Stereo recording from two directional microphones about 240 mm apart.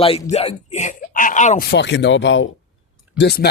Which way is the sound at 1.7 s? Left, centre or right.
Left.